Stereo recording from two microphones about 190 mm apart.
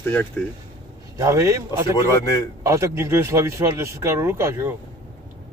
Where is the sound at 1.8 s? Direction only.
20° left (ahead or behind).